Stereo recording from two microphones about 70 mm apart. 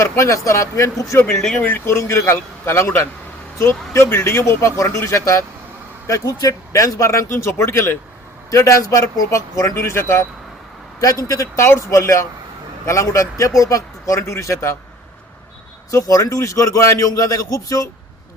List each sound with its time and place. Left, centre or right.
0.0 s a man's voice: left
1.3 s speech: centre
1.6 s a man's voice: left
8.4 s a man's voice: left
9.7 s speech: left
11.3 s a man's voice: left
15.9 s a man's voice: left